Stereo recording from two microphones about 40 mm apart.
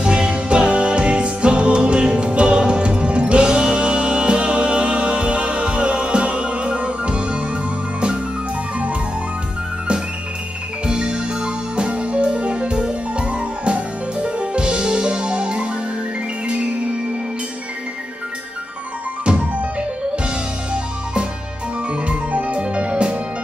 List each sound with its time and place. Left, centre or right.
0.0 s music: right
10.9 s music: right
20.7 s music: right
22.0 s music: right
22.6 s music: right